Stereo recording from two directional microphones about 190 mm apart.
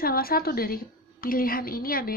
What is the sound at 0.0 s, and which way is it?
A woman's voice, 50° left (ahead or behind).